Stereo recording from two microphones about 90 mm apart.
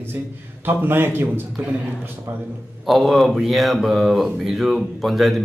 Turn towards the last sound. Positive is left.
turn(degrees=0)  # may be behind; listen again after turning